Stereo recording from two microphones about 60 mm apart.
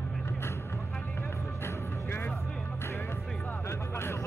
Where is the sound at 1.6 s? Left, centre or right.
Left.